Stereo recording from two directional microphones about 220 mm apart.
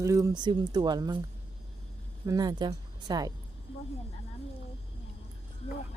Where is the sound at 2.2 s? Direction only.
15° right (ahead or behind).